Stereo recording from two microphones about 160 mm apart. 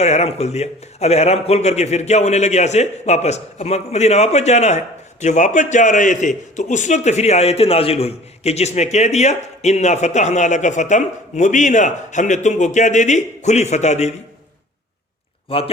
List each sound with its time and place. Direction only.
0.0 s a man's voice: 40° left (ahead or behind)
15.4 s a man's voice: 35° left (ahead or behind)